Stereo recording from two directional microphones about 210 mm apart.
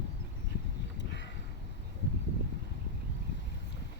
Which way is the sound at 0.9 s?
55° left (ahead or behind).